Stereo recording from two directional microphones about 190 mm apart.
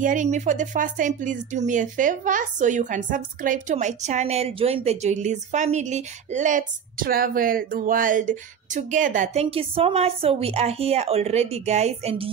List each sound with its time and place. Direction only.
0.0 s speech: 45° right (ahead or behind)